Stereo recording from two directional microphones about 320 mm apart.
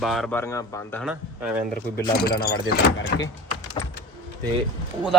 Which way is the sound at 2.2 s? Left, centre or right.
Left.